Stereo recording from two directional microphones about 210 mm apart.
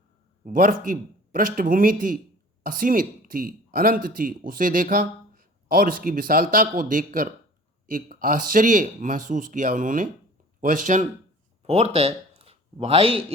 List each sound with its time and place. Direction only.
0.4 s speech: 40° right (ahead or behind)